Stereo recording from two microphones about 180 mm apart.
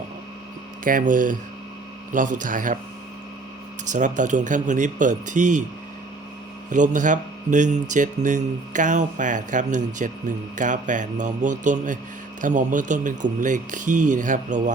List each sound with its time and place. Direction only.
0.9 s speech: 50° right (ahead or behind)
3.8 s speech: 45° right (ahead or behind)
6.7 s speech: 45° right (ahead or behind)